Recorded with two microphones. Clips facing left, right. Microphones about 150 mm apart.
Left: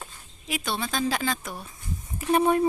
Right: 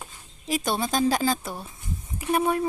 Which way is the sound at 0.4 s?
40° right (ahead or behind).